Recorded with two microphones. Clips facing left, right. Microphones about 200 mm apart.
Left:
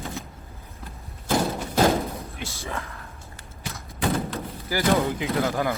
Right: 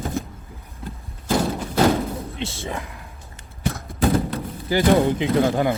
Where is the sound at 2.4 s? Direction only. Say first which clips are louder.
Right 4 dB; 25° right (ahead or behind).